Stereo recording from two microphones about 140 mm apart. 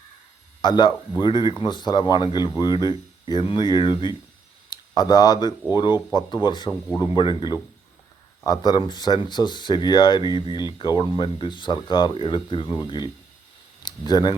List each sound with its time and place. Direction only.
0.6 s speech: 30° left (ahead or behind)
13.8 s speech: 30° left (ahead or behind)